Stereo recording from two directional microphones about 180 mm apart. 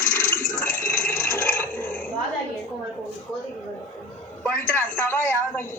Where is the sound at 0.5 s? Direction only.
10° left (ahead or behind).